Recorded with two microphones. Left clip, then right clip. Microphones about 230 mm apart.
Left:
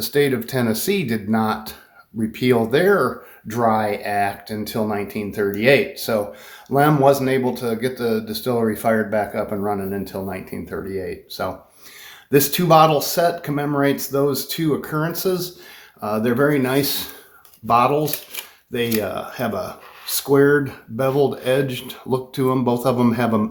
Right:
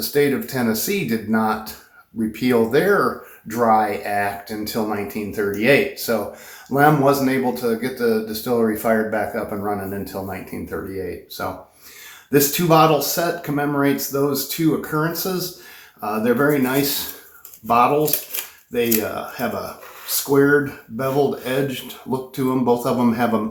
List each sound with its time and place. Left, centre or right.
0.0 s speech: left
19.1 s speech: left